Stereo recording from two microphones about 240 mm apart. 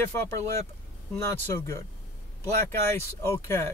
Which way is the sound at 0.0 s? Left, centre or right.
Centre.